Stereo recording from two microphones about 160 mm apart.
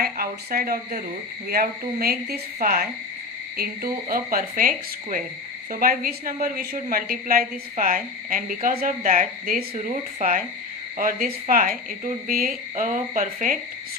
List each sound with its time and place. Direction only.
0.0 s a woman's voice: 65° right (ahead or behind)
4.1 s a woman's voice: 65° right (ahead or behind)
5.8 s a woman's voice: 65° right (ahead or behind)